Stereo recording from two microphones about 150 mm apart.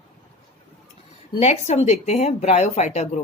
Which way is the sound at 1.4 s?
45° left (ahead or behind).